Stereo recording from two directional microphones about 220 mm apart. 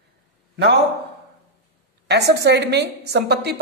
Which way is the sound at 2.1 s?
50° right (ahead or behind).